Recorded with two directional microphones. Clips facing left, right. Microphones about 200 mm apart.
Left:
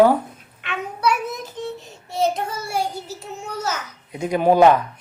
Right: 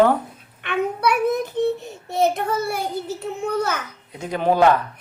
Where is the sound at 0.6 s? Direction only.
55° right (ahead or behind).